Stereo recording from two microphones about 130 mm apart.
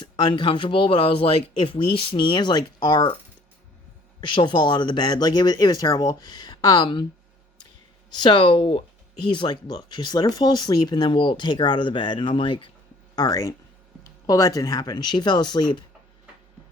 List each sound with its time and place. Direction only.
0.0 s speech: 35° left (ahead or behind)
4.2 s speech: 35° left (ahead or behind)
8.1 s speech: 35° left (ahead or behind)
13.1 s speech: 30° left (ahead or behind)